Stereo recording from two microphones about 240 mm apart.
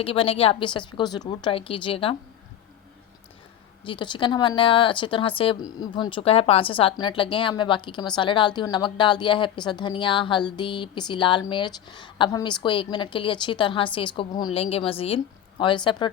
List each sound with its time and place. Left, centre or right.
0.0 s speech: left
3.8 s speech: centre